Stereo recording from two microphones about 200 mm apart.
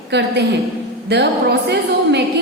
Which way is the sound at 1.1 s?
60° right (ahead or behind).